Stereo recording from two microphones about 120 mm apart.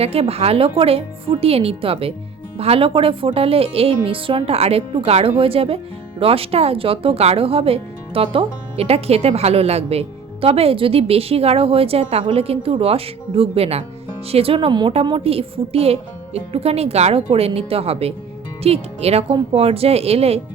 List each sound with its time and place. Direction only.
0.0 s speech: 55° right (ahead or behind)
14.7 s a woman's voice: 40° right (ahead or behind)
15.0 s a woman's voice: 50° right (ahead or behind)